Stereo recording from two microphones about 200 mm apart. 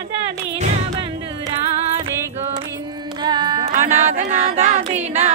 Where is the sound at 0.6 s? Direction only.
35° right (ahead or behind).